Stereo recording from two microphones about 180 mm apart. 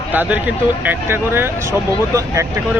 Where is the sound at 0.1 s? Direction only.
10° right (ahead or behind).